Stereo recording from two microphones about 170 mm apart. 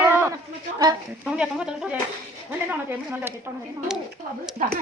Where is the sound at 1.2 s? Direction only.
5° right (ahead or behind).